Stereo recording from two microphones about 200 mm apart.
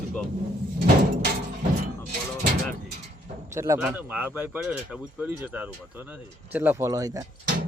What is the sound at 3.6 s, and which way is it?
Speech, 15° right (ahead or behind).